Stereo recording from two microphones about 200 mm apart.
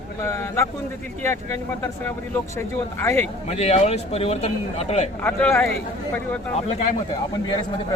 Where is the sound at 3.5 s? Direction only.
30° left (ahead or behind).